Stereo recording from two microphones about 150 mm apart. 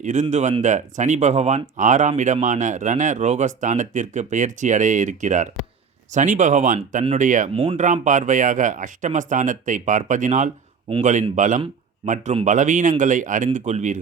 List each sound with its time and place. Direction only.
0.0 s speech: 55° right (ahead or behind)
7.5 s speech: 35° right (ahead or behind)
8.0 s speech: 55° right (ahead or behind)